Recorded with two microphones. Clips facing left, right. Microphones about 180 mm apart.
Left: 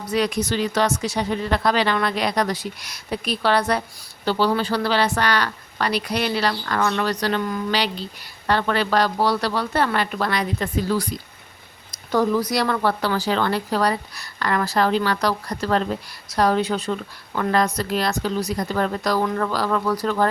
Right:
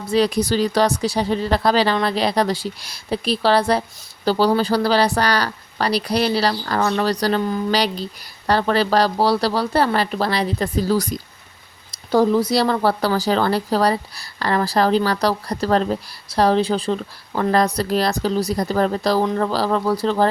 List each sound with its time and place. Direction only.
0.0 s speech: 30° right (ahead or behind)
11.9 s speech: 30° right (ahead or behind)